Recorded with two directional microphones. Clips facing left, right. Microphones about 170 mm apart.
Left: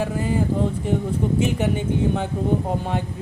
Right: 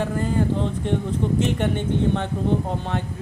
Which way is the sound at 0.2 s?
10° left (ahead or behind).